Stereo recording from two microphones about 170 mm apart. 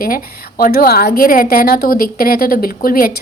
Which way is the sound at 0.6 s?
60° left (ahead or behind).